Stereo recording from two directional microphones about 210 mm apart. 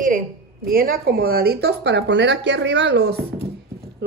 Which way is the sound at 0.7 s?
45° right (ahead or behind).